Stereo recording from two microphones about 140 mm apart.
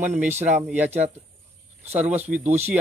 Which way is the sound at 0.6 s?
10° right (ahead or behind).